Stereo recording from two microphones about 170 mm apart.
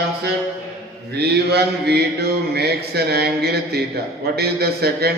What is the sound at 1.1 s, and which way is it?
A man's voice, 70° right (ahead or behind).